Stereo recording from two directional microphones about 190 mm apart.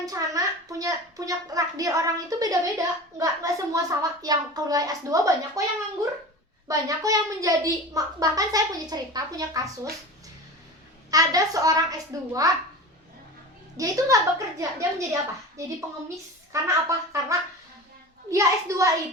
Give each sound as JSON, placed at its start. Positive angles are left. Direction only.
{"t": 0.0, "sound": "a child's voice", "side_deg": -20}
{"t": 11.1, "sound": "a child's voice", "side_deg": -20}
{"t": 13.7, "sound": "a woman's voice", "side_deg": -15}
{"t": 16.5, "sound": "a woman's voice", "side_deg": -15}